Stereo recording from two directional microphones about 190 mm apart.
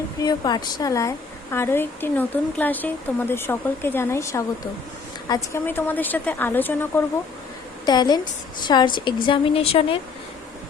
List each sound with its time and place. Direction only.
0.2 s speech: 20° left (ahead or behind)
7.9 s a woman's voice: 20° left (ahead or behind)